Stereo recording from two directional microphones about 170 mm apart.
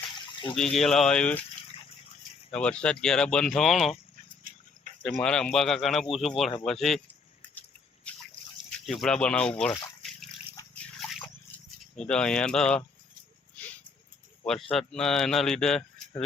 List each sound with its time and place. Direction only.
0.5 s speech: centre (ahead or behind)
2.5 s speech: 5° left (ahead or behind)
4.4 s a sound: 50° right (ahead or behind)
5.0 s speech: 5° left (ahead or behind)
8.9 s speech: 5° left (ahead or behind)
11.5 s speech: 5° left (ahead or behind)
14.8 s speech: 5° left (ahead or behind)